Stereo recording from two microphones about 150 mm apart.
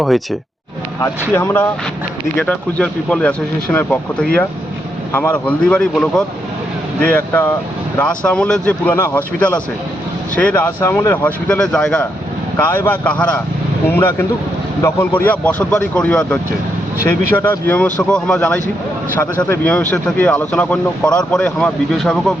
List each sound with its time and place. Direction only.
1.4 s speech: 15° left (ahead or behind)
17.7 s speech: 10° left (ahead or behind)